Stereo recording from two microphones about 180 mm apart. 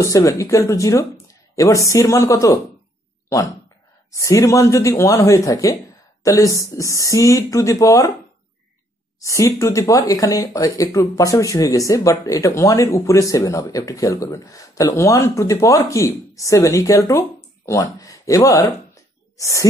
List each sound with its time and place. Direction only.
0.0 s speech: 20° left (ahead or behind)
4.1 s speech: 15° left (ahead or behind)
9.2 s speech: 15° left (ahead or behind)